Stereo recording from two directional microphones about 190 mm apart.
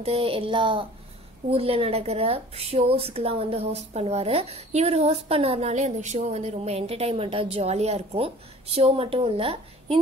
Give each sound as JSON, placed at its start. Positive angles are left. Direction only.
{"t": 0.0, "sound": "speech", "side_deg": -30}